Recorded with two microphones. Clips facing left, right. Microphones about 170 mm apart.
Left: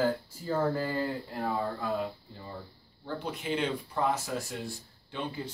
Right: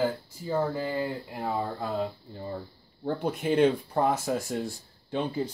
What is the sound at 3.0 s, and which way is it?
Speech, 50° right (ahead or behind).